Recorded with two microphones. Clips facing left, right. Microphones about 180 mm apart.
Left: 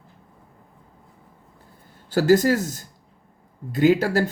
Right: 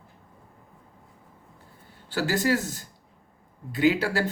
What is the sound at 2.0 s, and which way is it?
Speech, 40° left (ahead or behind).